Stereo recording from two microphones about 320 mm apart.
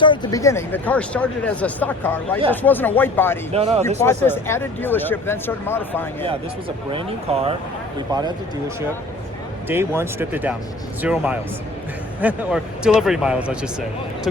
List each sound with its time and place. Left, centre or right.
0.0 s speech: centre
3.5 s speech: centre
3.8 s speech: centre
6.9 s speech: centre